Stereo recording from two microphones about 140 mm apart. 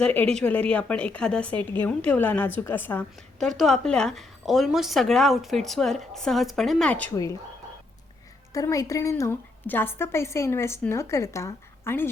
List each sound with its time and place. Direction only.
0.0 s speech: 10° left (ahead or behind)
3.4 s a woman's voice: centre (ahead or behind)
8.5 s a woman's voice: 25° left (ahead or behind)